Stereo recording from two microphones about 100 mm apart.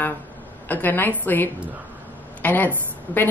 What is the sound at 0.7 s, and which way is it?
A woman's voice, 20° left (ahead or behind).